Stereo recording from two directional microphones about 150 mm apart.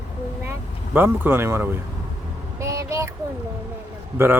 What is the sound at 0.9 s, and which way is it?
Speech, 15° right (ahead or behind).